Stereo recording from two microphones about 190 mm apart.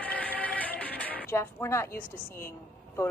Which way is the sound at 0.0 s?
10° left (ahead or behind).